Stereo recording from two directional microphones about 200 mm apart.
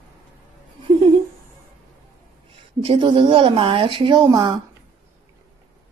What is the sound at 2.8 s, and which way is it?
Speech, 25° right (ahead or behind).